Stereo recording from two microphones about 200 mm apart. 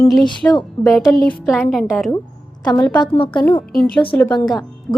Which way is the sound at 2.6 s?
20° left (ahead or behind).